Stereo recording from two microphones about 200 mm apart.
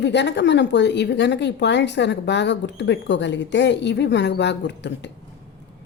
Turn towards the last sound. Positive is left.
turn(degrees=60)  # may be behind; listen again after turning